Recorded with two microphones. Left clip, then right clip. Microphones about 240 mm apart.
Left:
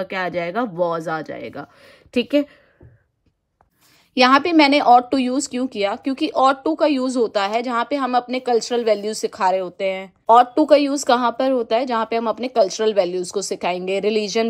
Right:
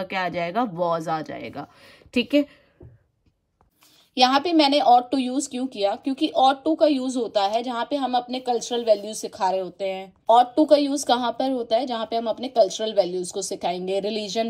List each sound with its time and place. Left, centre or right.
0.0 s speech: centre
4.1 s speech: left